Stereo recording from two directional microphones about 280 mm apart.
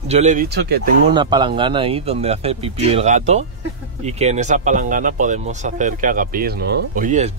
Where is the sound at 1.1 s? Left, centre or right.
Centre.